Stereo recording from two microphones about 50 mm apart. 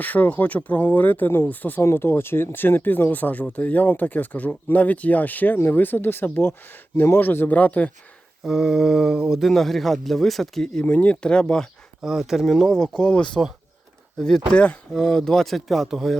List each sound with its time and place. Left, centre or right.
0.0 s speech: left
1.8 s speech: left
7.5 s speech: left
8.4 s mantra: centre
9.4 s speech: centre
10.8 s speech: left
12.0 s mantra: centre
12.5 s speech: centre
14.5 s speech: left
14.9 s speech: centre